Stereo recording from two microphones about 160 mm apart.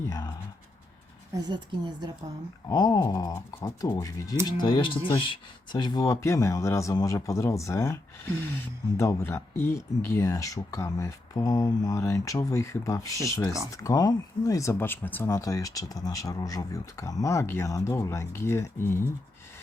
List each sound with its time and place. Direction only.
0.1 s writing: 25° left (ahead or behind)
1.3 s a woman's voice: 25° right (ahead or behind)
2.6 s speech: 25° left (ahead or behind)
9.0 s speech: 20° left (ahead or behind)